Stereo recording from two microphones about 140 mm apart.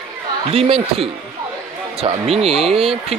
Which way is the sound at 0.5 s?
45° right (ahead or behind).